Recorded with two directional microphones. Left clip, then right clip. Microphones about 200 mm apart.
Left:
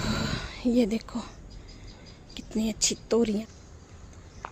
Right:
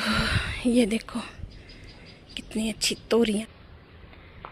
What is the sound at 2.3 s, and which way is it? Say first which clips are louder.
Speech: right 1 dB; 10° left (ahead or behind).